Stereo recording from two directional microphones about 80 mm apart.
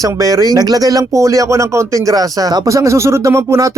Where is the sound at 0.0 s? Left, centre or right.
Right.